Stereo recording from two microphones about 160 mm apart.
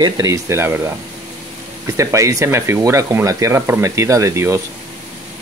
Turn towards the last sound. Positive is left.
turn(degrees=-15)  # may be behind; listen again after turning